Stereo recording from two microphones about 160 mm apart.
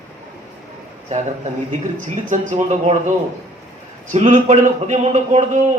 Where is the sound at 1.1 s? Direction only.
50° right (ahead or behind).